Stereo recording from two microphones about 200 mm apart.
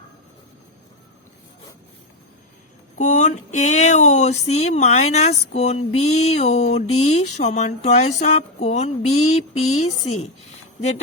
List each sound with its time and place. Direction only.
3.0 s speech: 35° left (ahead or behind)